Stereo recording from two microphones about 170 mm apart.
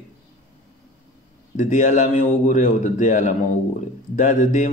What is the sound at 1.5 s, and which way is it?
A man's voice, 45° left (ahead or behind).